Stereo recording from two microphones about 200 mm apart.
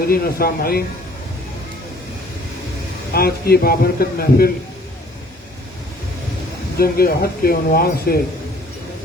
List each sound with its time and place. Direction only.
0.1 s speech: 50° left (ahead or behind)
3.1 s speech: 50° left (ahead or behind)
6.7 s speech: 50° left (ahead or behind)